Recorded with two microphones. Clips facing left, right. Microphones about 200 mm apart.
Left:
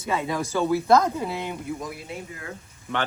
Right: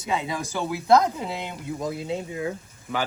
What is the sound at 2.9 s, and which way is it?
Speech, centre (ahead or behind).